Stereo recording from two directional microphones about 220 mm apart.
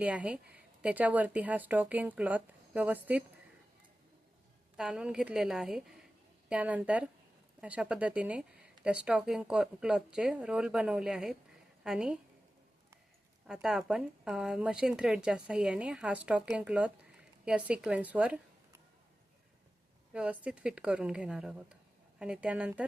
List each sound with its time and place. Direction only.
0.0 s speech: 5° right (ahead or behind)
4.8 s a woman's voice: 5° right (ahead or behind)
13.5 s speech: centre (ahead or behind)
20.1 s speech: 5° right (ahead or behind)